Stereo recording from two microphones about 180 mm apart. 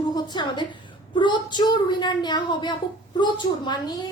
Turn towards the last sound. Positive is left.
turn(degrees=25)  # may be behind; listen again after turning